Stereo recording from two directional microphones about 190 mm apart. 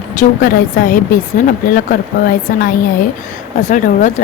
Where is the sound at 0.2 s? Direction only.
45° left (ahead or behind).